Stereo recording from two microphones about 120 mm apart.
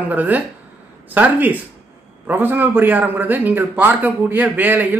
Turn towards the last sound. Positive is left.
turn(degrees=-15)  # may be behind; listen again after turning